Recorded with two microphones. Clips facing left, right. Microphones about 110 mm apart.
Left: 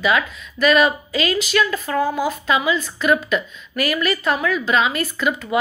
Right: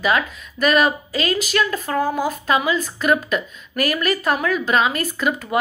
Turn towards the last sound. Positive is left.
turn(degrees=-40)  # may be behind; listen again after turning